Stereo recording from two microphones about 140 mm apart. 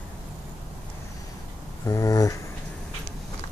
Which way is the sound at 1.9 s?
25° left (ahead or behind).